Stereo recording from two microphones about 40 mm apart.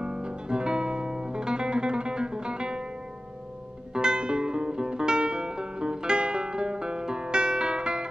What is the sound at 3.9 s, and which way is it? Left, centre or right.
Music, right.